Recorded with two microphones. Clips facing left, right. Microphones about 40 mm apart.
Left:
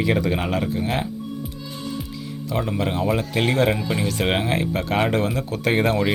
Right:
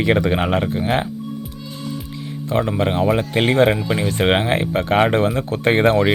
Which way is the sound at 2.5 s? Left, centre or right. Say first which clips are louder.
Right 5 dB; right.